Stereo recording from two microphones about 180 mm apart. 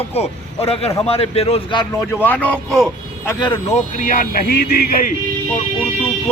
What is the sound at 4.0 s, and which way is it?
Speech, 50° left (ahead or behind).